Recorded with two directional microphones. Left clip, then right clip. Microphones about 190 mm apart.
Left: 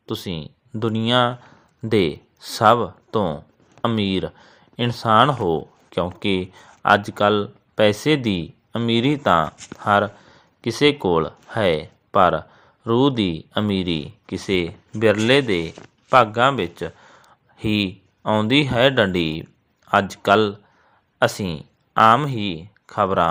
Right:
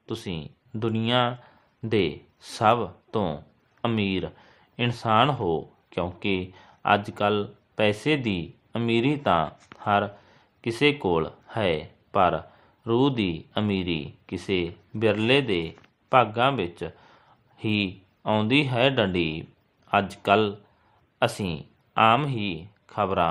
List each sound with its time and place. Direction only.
0.0 s speech: 20° left (ahead or behind)
16.7 s a sound: 20° left (ahead or behind)
17.8 s speech: 20° left (ahead or behind)